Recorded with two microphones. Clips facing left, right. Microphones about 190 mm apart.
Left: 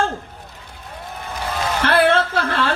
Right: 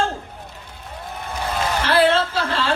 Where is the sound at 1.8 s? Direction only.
55° left (ahead or behind).